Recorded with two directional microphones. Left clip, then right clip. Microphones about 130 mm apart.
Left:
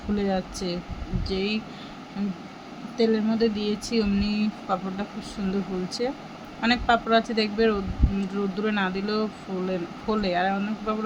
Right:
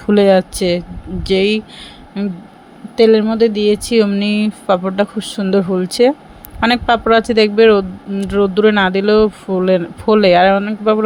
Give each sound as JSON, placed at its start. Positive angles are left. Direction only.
{"t": 0.1, "sound": "speech", "side_deg": -90}
{"t": 2.2, "sound": "speech", "side_deg": -65}
{"t": 3.0, "sound": "speech", "side_deg": -90}